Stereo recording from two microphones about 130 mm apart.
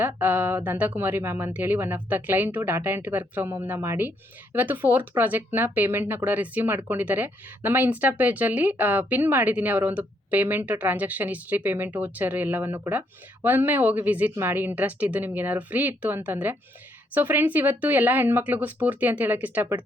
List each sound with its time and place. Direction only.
0.0 s speech: 15° right (ahead or behind)